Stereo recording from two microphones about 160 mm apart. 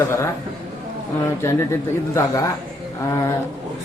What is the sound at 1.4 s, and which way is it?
A man's voice, 15° left (ahead or behind).